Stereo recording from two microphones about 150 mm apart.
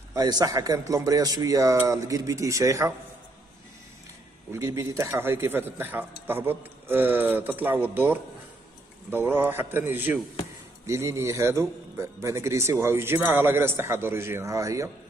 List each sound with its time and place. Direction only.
0.1 s speech: 25° right (ahead or behind)
4.5 s speech: 20° right (ahead or behind)